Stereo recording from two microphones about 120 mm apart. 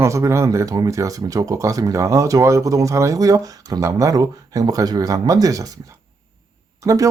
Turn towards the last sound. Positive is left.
turn(degrees=-30)  # may be behind; listen again after turning